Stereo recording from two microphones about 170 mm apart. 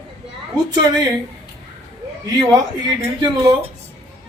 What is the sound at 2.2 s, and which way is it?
A man's voice, 25° right (ahead or behind).